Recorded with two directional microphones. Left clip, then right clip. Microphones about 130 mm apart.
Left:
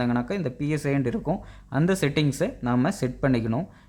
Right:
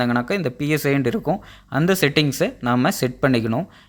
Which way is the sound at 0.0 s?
25° right (ahead or behind).